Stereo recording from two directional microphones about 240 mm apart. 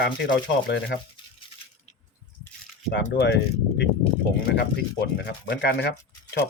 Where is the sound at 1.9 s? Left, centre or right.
Left.